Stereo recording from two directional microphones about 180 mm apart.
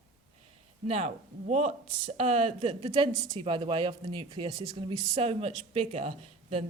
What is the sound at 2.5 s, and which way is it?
Speech, 30° right (ahead or behind).